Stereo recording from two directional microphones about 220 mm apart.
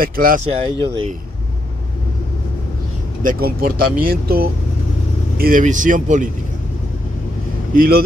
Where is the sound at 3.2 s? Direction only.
40° right (ahead or behind).